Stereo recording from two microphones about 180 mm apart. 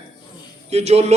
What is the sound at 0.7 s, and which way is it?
Speech, 35° right (ahead or behind).